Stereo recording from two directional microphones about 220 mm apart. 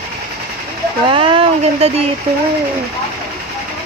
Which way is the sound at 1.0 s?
25° right (ahead or behind).